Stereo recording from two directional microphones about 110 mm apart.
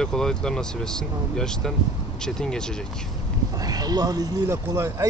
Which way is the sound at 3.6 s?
35° right (ahead or behind).